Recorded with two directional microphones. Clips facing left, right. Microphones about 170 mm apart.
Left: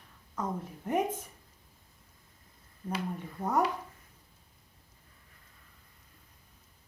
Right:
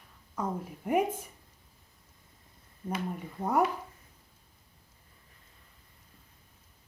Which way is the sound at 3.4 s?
25° right (ahead or behind).